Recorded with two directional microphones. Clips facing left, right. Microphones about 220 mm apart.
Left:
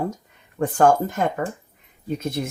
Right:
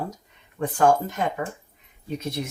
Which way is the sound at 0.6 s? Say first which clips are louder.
Left 3 dB; 50° left (ahead or behind).